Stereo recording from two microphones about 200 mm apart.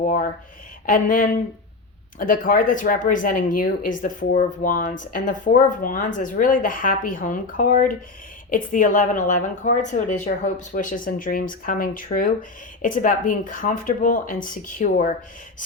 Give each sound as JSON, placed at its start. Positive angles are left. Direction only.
{"t": 0.0, "sound": "a woman's voice", "side_deg": 40}